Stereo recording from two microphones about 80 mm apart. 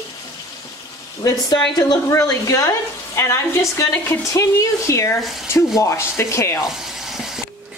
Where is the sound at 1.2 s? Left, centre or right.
Left.